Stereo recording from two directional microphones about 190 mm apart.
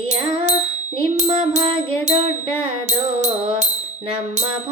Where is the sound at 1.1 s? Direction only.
30° right (ahead or behind).